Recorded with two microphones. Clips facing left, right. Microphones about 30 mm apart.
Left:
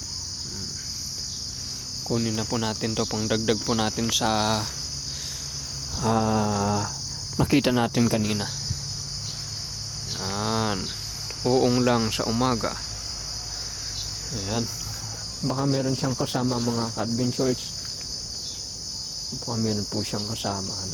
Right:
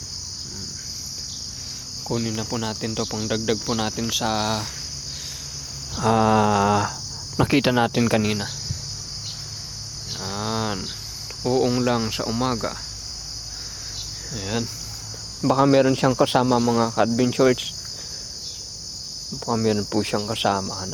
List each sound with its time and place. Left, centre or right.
2.0 s speech: centre
6.0 s a sound: right
6.2 s cricket: right
7.3 s speech: right
10.1 s a sound: centre
11.4 s speech: centre
14.3 s speech: right
15.4 s cricket: right
16.1 s cricket: right
19.5 s cricket: right